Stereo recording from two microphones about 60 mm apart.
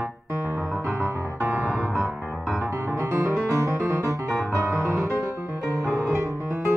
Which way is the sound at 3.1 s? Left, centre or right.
Right.